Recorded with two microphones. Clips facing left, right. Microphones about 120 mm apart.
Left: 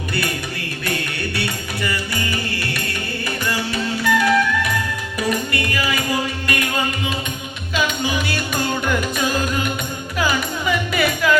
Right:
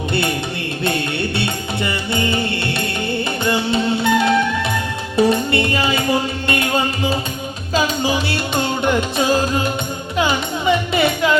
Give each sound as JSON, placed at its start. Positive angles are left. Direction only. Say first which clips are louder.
{"t": 1.4, "sound": "music", "louder": "right 3 dB", "side_deg": -25}
{"t": 3.4, "sound": "music", "louder": "right 6 dB", "side_deg": -25}